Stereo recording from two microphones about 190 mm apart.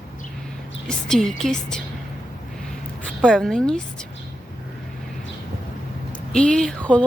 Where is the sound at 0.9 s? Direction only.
5° left (ahead or behind).